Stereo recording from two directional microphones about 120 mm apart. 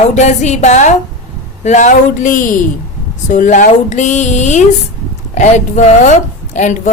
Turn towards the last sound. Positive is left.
turn(degrees=90)